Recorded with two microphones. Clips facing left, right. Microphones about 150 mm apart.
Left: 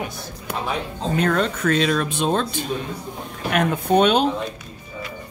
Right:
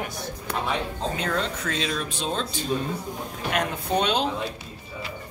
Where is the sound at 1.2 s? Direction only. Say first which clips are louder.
Left 10 dB; 55° left (ahead or behind).